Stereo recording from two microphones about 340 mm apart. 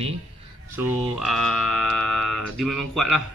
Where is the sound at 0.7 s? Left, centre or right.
Centre.